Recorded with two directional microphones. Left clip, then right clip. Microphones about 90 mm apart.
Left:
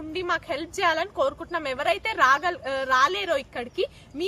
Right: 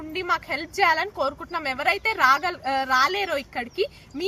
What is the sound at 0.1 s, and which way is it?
A woman's voice, 25° left (ahead or behind).